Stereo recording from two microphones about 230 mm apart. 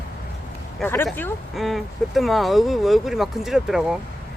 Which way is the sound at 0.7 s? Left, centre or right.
Centre.